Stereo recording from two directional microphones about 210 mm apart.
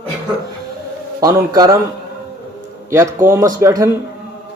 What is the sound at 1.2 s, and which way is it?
Speech, 15° right (ahead or behind).